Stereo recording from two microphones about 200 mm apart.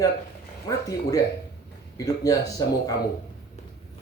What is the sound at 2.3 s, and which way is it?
Speech, 15° left (ahead or behind).